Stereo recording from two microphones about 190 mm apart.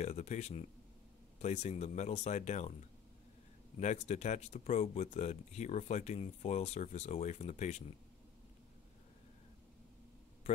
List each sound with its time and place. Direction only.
0.0 s speech: 35° left (ahead or behind)
3.8 s speech: 40° left (ahead or behind)